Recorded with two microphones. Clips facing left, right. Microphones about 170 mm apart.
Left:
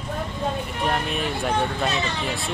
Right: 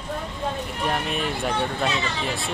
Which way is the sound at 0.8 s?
Centre (ahead or behind).